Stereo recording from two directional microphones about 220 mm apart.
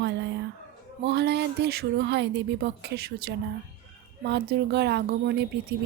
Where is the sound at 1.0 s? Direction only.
50° right (ahead or behind).